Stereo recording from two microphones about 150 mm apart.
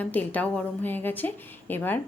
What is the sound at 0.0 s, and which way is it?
A woman's voice, 10° left (ahead or behind).